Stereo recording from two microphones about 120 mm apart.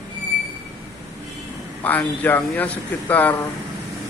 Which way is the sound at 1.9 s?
15° left (ahead or behind).